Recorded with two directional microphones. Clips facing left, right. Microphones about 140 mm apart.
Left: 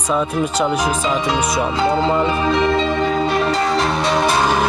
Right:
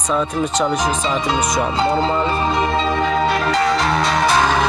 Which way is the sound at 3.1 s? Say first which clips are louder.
Even; 85° right.